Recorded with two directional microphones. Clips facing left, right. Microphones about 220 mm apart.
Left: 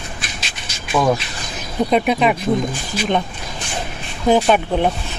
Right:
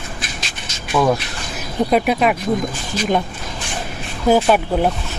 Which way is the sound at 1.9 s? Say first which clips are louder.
Even; 5° right (ahead or behind).